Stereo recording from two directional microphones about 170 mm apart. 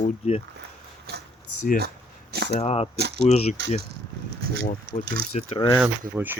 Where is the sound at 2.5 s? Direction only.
35° left (ahead or behind).